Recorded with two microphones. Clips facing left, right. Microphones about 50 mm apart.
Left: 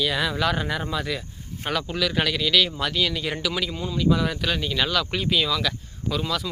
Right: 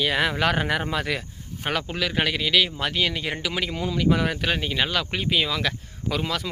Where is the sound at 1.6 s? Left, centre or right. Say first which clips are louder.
Left 1 dB; right.